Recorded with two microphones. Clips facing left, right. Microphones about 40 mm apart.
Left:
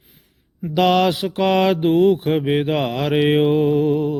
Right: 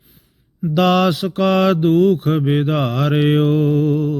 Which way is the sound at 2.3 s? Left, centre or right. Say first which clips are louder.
Right 1 dB; centre.